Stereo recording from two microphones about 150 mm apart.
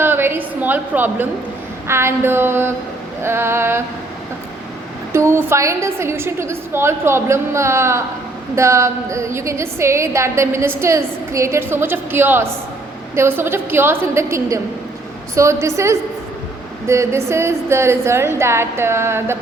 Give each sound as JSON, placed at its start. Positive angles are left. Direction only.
{"t": 0.0, "sound": "a sound", "side_deg": -15}
{"t": 1.9, "sound": "a woman's voice", "side_deg": -15}
{"t": 5.1, "sound": "a woman's voice", "side_deg": -15}